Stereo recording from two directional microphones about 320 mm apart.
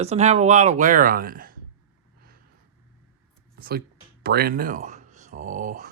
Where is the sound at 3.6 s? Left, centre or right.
Right.